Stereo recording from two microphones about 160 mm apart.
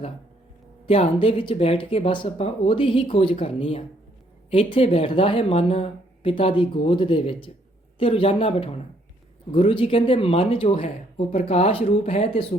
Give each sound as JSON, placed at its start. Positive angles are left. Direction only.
{"t": 0.9, "sound": "speech", "side_deg": 35}